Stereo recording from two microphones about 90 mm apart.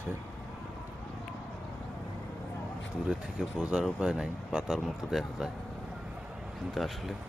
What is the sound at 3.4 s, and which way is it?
Speech, 5° right (ahead or behind).